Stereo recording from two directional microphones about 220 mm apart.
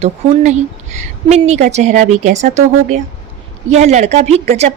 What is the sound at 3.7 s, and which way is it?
Speech, 30° right (ahead or behind).